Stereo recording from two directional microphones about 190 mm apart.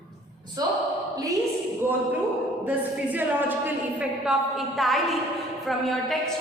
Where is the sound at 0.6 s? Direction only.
20° right (ahead or behind).